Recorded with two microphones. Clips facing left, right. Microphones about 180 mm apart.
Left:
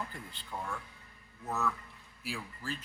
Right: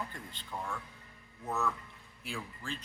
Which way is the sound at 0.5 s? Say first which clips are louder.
Even; 5° right (ahead or behind).